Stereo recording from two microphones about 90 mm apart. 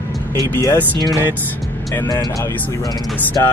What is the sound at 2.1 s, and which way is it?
Speech, 45° left (ahead or behind).